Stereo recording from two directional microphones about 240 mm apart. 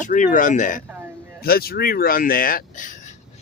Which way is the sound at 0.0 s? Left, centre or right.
Left.